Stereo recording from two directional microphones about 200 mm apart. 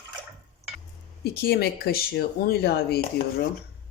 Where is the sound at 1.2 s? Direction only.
50° left (ahead or behind).